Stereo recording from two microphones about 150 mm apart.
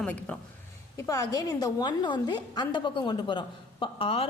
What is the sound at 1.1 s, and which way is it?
A woman's voice, 25° left (ahead or behind).